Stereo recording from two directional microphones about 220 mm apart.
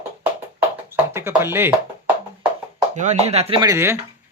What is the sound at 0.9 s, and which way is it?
Speech, 10° right (ahead or behind).